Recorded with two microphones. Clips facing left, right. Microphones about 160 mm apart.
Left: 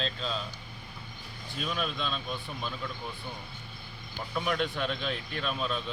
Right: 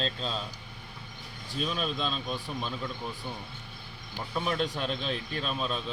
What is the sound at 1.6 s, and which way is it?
Speech, 35° right (ahead or behind).